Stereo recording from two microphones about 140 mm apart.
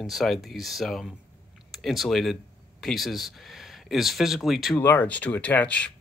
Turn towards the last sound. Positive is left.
turn(degrees=10)  # may be behind; listen again after turning